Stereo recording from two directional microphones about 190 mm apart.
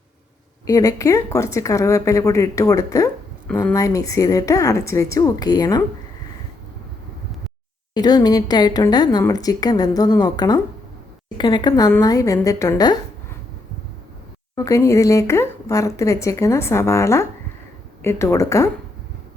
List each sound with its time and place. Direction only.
0.7 s speech: 20° left (ahead or behind)
7.9 s a woman's voice: 20° left (ahead or behind)
14.5 s speech: 15° left (ahead or behind)